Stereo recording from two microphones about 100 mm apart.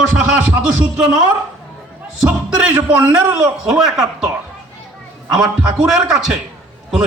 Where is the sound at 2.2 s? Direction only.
10° right (ahead or behind).